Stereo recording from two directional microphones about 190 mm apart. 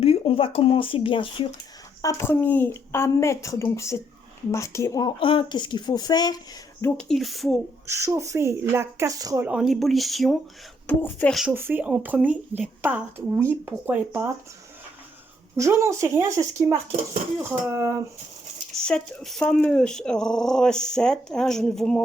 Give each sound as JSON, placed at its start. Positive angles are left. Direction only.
{"t": 0.0, "sound": "speech", "side_deg": 30}
{"t": 2.0, "sound": "a woman's voice", "side_deg": 15}
{"t": 6.8, "sound": "speech", "side_deg": 5}
{"t": 7.9, "sound": "a woman's voice", "side_deg": -15}
{"t": 9.5, "sound": "speech", "side_deg": 0}
{"t": 11.5, "sound": "a woman's voice", "side_deg": -10}
{"t": 15.5, "sound": "a woman's voice", "side_deg": -15}
{"t": 18.7, "sound": "speech", "side_deg": 5}